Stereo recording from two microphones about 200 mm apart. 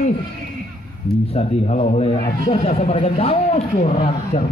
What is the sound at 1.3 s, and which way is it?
A man's voice, 35° left (ahead or behind).